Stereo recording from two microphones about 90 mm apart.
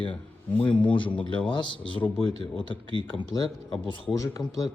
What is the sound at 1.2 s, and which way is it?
Speech, 15° left (ahead or behind).